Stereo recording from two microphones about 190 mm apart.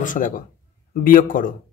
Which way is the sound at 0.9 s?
45° left (ahead or behind).